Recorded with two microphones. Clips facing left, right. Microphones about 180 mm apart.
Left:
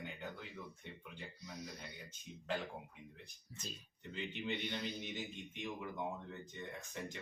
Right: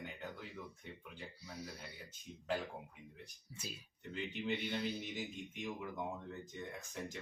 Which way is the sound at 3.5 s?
10° right (ahead or behind).